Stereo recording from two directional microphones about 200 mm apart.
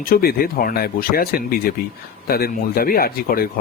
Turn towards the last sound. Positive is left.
turn(degrees=50)  # may be behind; listen again after turning